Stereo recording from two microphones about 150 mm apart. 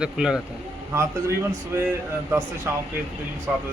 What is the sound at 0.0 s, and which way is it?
Speech, 5° right (ahead or behind).